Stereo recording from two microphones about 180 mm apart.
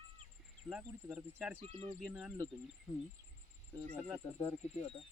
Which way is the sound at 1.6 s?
35° right (ahead or behind).